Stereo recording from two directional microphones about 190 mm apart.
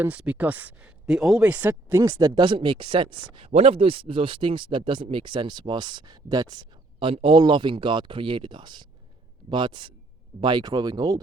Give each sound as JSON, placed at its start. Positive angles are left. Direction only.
{"t": 0.0, "sound": "speech", "side_deg": -5}